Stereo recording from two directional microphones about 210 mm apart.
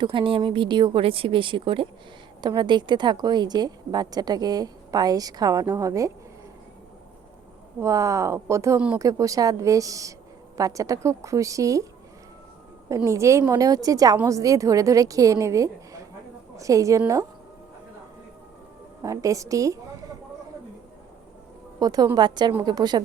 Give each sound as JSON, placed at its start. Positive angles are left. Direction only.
{"t": 0.0, "sound": "a woman's voice", "side_deg": -25}
{"t": 7.8, "sound": "a woman's voice", "side_deg": -15}
{"t": 12.9, "sound": "a woman's voice", "side_deg": -15}
{"t": 19.0, "sound": "a woman's voice", "side_deg": -15}
{"t": 21.8, "sound": "a woman's voice", "side_deg": -15}